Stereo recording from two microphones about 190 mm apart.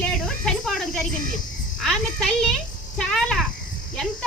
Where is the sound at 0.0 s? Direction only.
Centre (ahead or behind).